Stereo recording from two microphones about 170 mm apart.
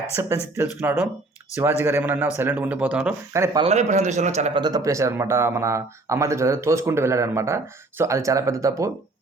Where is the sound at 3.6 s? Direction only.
40° right (ahead or behind).